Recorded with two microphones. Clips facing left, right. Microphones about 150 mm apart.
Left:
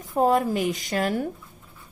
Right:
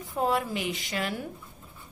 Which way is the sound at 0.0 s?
45° left (ahead or behind).